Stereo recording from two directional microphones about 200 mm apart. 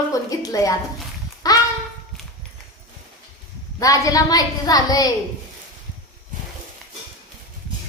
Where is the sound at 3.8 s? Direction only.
15° left (ahead or behind).